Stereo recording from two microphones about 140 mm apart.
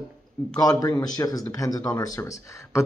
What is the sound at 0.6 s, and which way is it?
Speech, 25° left (ahead or behind).